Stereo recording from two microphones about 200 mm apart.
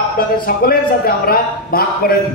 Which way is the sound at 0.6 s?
50° left (ahead or behind).